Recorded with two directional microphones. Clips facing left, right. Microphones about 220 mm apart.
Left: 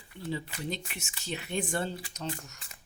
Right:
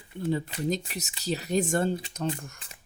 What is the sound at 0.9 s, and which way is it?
Speech, 40° right (ahead or behind).